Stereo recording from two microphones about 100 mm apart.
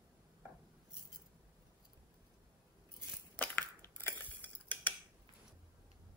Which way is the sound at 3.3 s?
20° left (ahead or behind).